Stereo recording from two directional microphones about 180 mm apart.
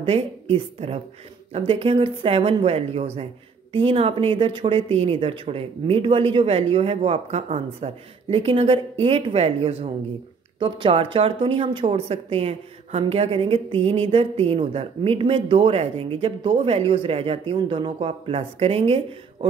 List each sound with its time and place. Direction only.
0.0 s a woman's voice: 30° right (ahead or behind)